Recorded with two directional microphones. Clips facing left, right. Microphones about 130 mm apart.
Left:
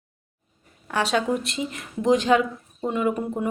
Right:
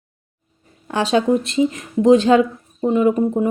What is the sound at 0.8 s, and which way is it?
Speech, 25° right (ahead or behind).